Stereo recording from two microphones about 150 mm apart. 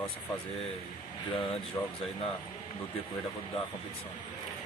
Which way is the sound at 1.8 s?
25° left (ahead or behind).